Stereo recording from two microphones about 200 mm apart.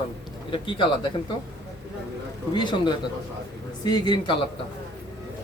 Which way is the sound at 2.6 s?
20° left (ahead or behind).